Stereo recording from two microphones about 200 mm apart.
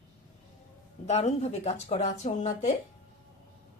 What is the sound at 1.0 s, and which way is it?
Speech, 35° left (ahead or behind).